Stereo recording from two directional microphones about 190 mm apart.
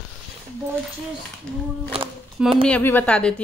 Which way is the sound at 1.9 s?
30° right (ahead or behind).